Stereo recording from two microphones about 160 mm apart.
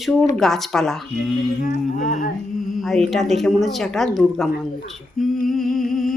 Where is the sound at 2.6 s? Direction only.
Centre (ahead or behind).